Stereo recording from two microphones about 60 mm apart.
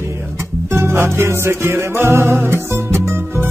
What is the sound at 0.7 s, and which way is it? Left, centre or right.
Music, right.